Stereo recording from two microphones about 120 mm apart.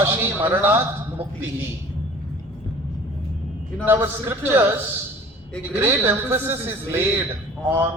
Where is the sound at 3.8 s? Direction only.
20° right (ahead or behind).